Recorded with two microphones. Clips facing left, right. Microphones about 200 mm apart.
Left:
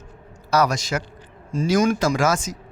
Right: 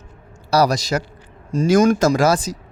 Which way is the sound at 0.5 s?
35° right (ahead or behind).